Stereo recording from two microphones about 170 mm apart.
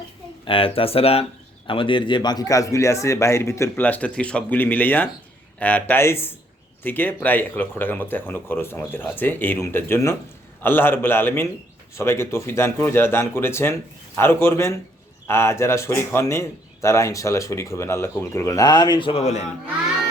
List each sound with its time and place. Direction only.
0.4 s a man's voice: 30° left (ahead or behind)